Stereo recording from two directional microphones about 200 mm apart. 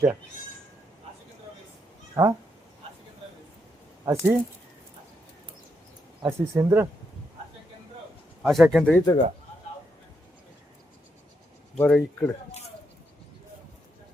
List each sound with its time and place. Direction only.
2.2 s speech: 10° right (ahead or behind)
4.0 s speech: 15° right (ahead or behind)
6.2 s speech: 15° right (ahead or behind)
8.4 s speech: centre (ahead or behind)
9.0 s speech: 20° left (ahead or behind)
11.8 s speech: 10° left (ahead or behind)